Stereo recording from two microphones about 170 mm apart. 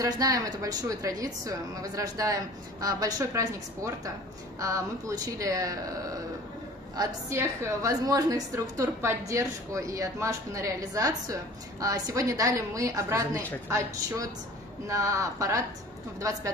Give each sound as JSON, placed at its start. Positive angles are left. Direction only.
{"t": 0.0, "sound": "a woman's voice", "side_deg": -20}
{"t": 7.0, "sound": "a woman's voice", "side_deg": -15}